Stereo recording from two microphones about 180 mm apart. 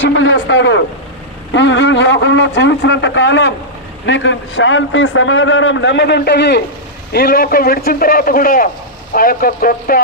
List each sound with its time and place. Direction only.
0.0 s a man's voice: 90° left; by 6.6 s 70° left (ahead or behind)
7.1 s a man's voice: 55° left (ahead or behind)